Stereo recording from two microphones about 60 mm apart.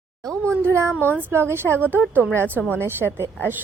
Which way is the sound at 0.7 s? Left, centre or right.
Right.